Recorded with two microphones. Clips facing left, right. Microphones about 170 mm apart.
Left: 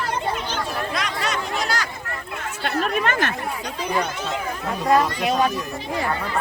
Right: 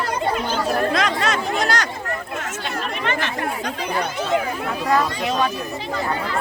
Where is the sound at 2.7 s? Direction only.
50° left (ahead or behind).